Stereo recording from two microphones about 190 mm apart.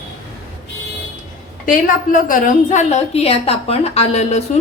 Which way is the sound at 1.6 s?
45° left (ahead or behind).